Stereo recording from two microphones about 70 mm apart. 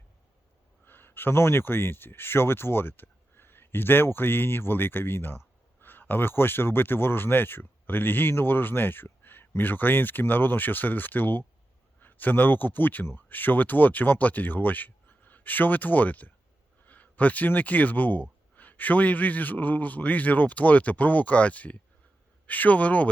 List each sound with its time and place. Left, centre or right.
0.9 s speech: left